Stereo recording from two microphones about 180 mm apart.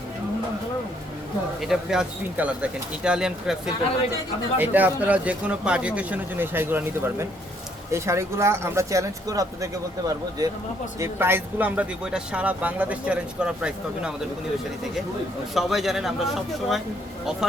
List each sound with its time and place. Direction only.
1.6 s speech: 5° right (ahead or behind)
15.5 s speech: centre (ahead or behind)